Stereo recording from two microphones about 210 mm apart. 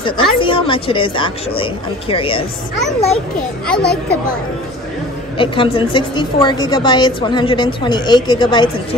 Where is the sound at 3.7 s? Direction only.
5° left (ahead or behind).